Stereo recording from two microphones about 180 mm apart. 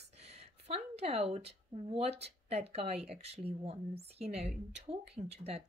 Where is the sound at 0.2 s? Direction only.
35° right (ahead or behind).